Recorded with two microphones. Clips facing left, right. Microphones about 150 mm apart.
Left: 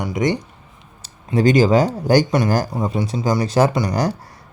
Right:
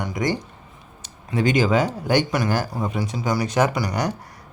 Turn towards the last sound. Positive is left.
turn(degrees=30)  # may be behind; listen again after turning